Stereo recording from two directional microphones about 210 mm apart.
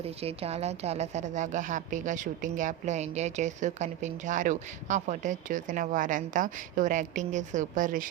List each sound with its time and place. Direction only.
0.0 s a woman's voice: 30° right (ahead or behind)